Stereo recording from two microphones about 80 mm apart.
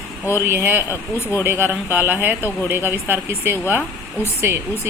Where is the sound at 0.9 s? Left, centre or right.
Left.